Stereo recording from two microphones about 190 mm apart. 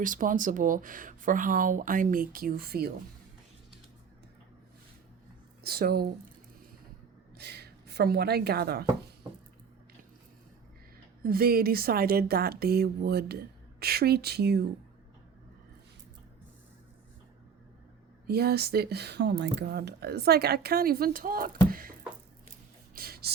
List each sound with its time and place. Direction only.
0.0 s speech: 45° right (ahead or behind)
5.6 s speech: 55° right (ahead or behind)
7.3 s speech: 60° right (ahead or behind)
11.2 s speech: 50° right (ahead or behind)
18.3 s speech: 55° right (ahead or behind)
21.7 s a sound: 50° right (ahead or behind)
23.0 s whispering: 55° right (ahead or behind)